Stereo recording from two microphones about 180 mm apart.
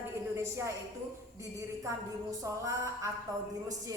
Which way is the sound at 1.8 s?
20° right (ahead or behind).